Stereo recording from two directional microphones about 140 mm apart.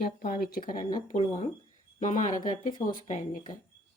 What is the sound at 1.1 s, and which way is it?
Speech, 55° left (ahead or behind).